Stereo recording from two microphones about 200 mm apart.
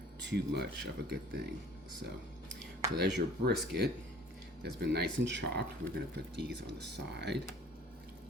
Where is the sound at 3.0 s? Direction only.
55° right (ahead or behind).